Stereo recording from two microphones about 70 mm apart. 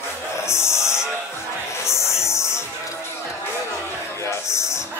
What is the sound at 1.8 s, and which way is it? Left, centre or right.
Music, left.